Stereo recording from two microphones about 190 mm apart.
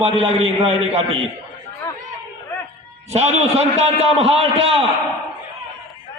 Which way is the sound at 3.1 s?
35° right (ahead or behind).